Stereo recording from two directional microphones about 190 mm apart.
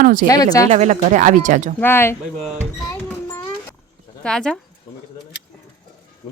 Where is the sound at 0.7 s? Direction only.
40° right (ahead or behind).